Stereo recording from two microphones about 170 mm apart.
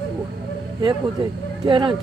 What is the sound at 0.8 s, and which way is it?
Speech, 30° right (ahead or behind).